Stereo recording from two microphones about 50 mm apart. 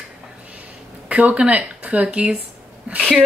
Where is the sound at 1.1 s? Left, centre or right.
Right.